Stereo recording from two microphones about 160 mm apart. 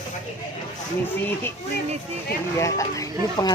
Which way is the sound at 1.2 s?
15° left (ahead or behind).